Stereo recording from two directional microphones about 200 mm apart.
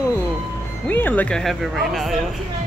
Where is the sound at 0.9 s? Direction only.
10° left (ahead or behind).